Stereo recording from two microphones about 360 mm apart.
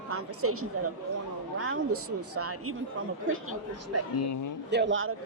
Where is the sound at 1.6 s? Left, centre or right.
Right.